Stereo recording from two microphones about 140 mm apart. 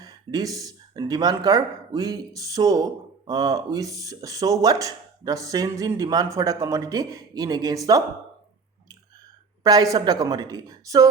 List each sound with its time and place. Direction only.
0.0 s speech: 25° right (ahead or behind)
9.6 s speech: 25° right (ahead or behind)